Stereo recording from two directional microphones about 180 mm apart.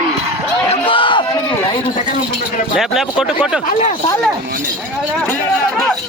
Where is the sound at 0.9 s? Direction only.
25° left (ahead or behind).